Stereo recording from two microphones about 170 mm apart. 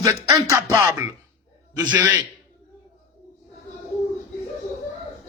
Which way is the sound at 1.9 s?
10° right (ahead or behind).